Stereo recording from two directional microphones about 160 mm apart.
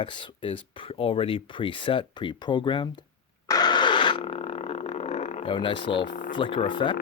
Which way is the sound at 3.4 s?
25° left (ahead or behind).